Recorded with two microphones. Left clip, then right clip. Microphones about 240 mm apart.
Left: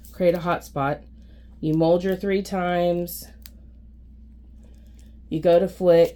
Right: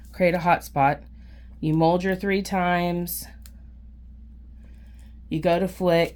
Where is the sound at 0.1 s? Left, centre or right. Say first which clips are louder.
Right 1 dB; right.